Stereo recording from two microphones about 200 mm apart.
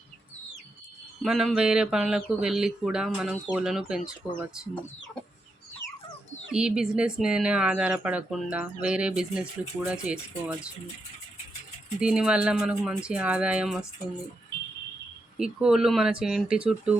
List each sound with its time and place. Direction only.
1.2 s speech: centre (ahead or behind)
6.5 s speech: 5° right (ahead or behind)
11.9 s speech: 5° right (ahead or behind)
15.4 s speech: 5° right (ahead or behind)